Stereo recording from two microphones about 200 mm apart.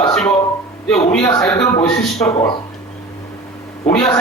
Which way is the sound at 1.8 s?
15° left (ahead or behind).